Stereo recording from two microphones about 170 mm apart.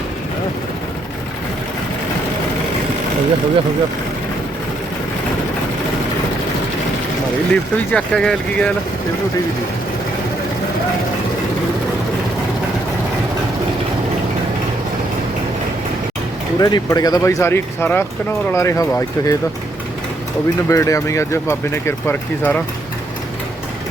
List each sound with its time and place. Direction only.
7.5 s speech: 5° left (ahead or behind)
16.6 s speech: 20° left (ahead or behind)
20.7 s speech: 20° left (ahead or behind)